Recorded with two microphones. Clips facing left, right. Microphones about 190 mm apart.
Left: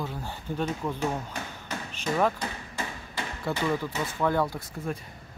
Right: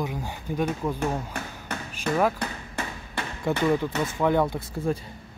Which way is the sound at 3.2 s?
60° right (ahead or behind).